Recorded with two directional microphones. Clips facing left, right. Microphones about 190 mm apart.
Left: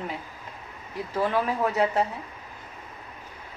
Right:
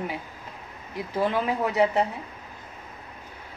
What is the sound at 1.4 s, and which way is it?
Speech, 15° right (ahead or behind).